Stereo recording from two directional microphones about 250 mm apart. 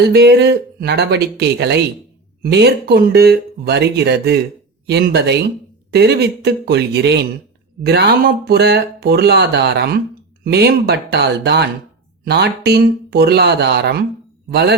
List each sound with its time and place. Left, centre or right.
0.1 s speech: right